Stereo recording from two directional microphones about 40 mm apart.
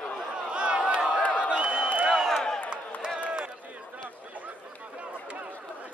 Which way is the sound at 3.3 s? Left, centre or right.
Right.